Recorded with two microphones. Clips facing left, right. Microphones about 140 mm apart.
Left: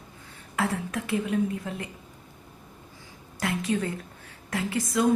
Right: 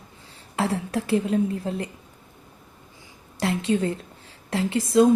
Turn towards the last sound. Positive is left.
turn(degrees=-30)  # may be behind; listen again after turning